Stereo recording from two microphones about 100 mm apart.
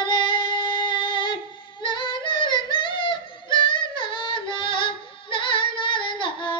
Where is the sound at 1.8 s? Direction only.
50° left (ahead or behind).